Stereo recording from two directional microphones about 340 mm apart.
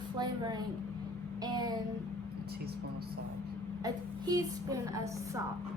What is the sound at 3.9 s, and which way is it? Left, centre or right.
Speech, centre.